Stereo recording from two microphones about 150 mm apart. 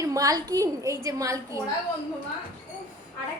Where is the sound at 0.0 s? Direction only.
25° right (ahead or behind).